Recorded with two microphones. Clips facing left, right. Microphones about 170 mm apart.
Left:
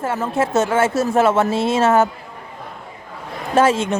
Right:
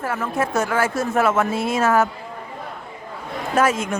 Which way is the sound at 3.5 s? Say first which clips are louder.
Left 4 dB; 30° left (ahead or behind).